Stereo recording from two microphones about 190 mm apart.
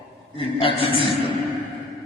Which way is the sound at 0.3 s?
30° left (ahead or behind).